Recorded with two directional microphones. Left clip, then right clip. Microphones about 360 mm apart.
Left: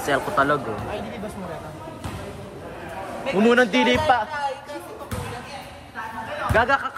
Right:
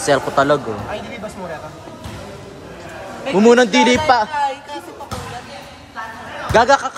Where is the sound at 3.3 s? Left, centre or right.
Centre.